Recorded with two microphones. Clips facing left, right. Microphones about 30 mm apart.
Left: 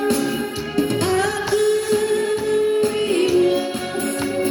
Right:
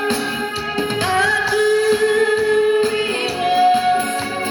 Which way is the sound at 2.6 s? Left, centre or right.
Right.